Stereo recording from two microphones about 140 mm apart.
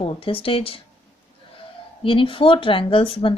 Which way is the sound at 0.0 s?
40° left (ahead or behind).